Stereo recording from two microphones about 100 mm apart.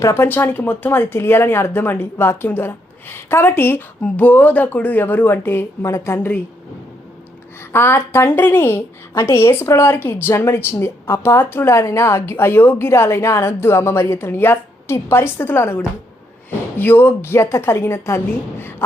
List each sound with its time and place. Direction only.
0.0 s speech: 25° left (ahead or behind)
7.7 s speech: 25° left (ahead or behind)